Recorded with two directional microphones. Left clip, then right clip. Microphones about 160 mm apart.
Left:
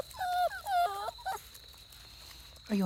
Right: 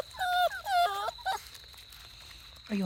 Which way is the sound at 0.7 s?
15° right (ahead or behind).